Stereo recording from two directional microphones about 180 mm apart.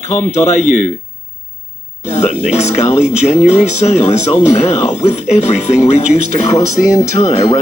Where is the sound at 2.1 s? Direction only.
35° left (ahead or behind).